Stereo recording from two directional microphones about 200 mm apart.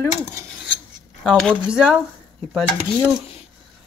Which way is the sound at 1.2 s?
5° left (ahead or behind).